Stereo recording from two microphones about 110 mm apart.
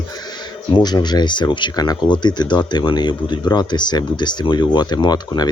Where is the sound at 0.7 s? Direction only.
40° left (ahead or behind).